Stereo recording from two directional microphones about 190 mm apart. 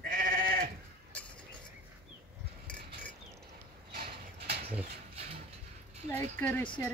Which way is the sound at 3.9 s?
55° right (ahead or behind).